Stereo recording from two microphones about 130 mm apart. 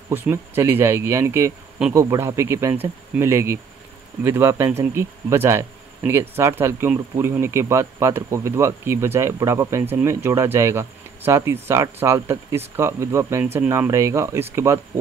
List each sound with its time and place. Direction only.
0.1 s speech: 15° right (ahead or behind)